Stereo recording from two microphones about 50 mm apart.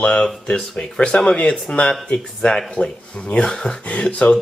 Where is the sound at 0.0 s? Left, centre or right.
Left.